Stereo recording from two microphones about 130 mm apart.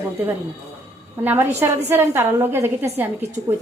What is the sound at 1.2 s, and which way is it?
A woman's voice, 15° right (ahead or behind).